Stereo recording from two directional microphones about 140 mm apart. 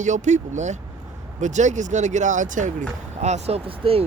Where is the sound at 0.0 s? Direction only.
60° right (ahead or behind).